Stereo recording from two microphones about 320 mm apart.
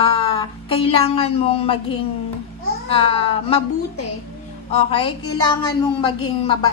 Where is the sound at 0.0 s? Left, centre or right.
Centre.